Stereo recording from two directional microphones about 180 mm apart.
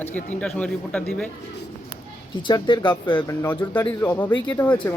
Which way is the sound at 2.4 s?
25° left (ahead or behind).